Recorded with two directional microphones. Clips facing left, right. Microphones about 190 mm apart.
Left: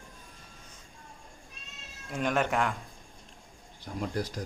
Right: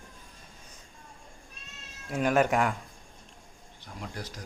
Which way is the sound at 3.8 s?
40° left (ahead or behind).